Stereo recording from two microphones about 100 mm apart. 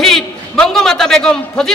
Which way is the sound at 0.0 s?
5° left (ahead or behind).